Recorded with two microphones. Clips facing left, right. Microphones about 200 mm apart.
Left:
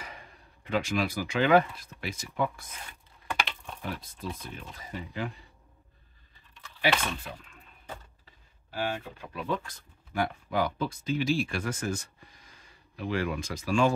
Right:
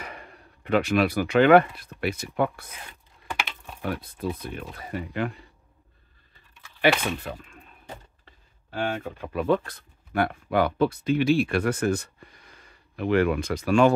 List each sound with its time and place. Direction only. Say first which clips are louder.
0.0 s speech: right 5 dB; 60° right (ahead or behind)
3.8 s speech: right 8 dB; 60° right (ahead or behind)
6.8 s speech: right 6 dB; 60° right (ahead or behind)
8.6 s speech: right 4 dB; 60° right (ahead or behind)